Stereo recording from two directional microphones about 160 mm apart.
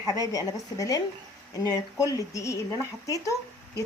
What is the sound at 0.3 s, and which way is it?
Speech, 20° left (ahead or behind).